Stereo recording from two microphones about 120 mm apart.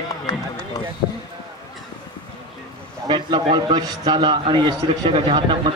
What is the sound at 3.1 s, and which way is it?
A man's voice, 40° right (ahead or behind).